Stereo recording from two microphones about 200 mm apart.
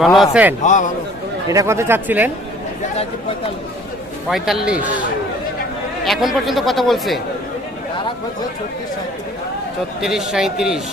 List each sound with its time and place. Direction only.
0.0 s speech: centre (ahead or behind)
0.6 s a man's voice: 40° left (ahead or behind)
1.5 s speech: 15° right (ahead or behind)
4.3 s speech: centre (ahead or behind)
6.1 s speech: centre (ahead or behind)
10.0 s speech: centre (ahead or behind)